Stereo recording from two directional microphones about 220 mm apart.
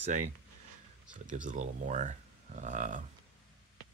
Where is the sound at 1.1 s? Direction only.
35° right (ahead or behind).